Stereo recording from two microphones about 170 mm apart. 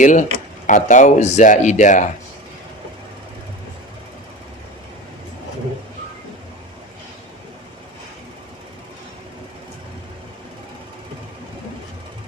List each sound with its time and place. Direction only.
0.0 s speech: 45° left (ahead or behind)